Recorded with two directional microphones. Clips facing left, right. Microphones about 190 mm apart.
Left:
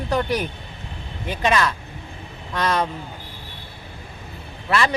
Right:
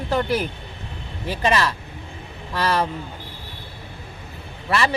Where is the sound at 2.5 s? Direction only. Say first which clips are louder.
Even; 5° right (ahead or behind).